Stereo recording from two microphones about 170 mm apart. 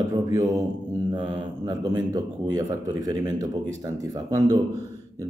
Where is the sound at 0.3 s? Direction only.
20° right (ahead or behind).